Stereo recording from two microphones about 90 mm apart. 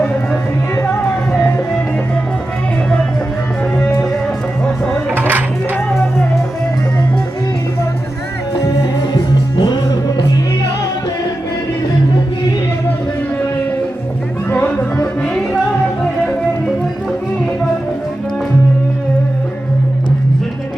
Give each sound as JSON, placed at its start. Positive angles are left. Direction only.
{"t": 4.6, "sound": "music", "side_deg": 5}
{"t": 5.1, "sound": "music", "side_deg": -20}
{"t": 8.6, "sound": "music", "side_deg": 45}
{"t": 14.5, "sound": "music", "side_deg": 20}
{"t": 16.6, "sound": "music", "side_deg": 5}